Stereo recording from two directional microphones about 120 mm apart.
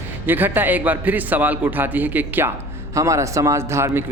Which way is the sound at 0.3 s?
15° right (ahead or behind).